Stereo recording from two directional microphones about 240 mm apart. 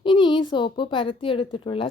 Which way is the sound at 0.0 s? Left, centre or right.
Centre.